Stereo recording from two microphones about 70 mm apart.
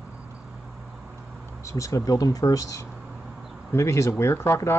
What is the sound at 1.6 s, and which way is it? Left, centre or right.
Speech, left.